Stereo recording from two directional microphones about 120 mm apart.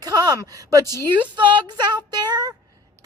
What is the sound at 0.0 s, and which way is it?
Speech, 30° right (ahead or behind).